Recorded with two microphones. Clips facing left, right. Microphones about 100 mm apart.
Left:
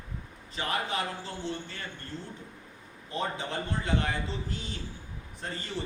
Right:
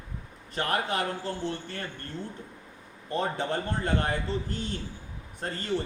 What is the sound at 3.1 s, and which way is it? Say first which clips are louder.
A man's voice: right 4 dB; 55° right (ahead or behind).